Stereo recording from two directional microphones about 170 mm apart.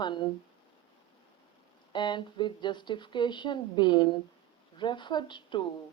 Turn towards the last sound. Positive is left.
turn(degrees=30)  # may be behind; listen again after turning